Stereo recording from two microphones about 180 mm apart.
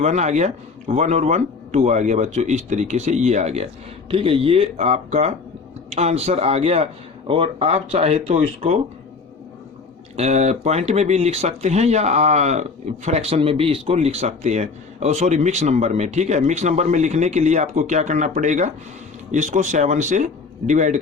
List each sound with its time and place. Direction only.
0.0 s speech: 40° right (ahead or behind)
10.2 s speech: 40° right (ahead or behind)